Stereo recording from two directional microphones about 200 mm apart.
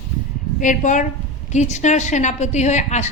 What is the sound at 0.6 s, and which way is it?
A woman's voice, 40° left (ahead or behind).